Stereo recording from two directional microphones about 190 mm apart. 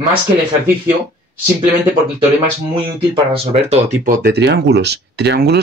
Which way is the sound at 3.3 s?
35° right (ahead or behind).